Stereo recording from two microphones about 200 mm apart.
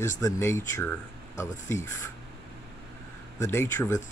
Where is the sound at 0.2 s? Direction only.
15° left (ahead or behind).